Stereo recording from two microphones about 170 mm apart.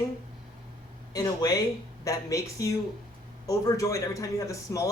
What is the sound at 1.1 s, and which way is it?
Speech, 20° left (ahead or behind).